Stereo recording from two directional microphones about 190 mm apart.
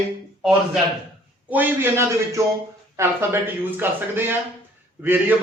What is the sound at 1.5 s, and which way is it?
A man's voice, 10° right (ahead or behind).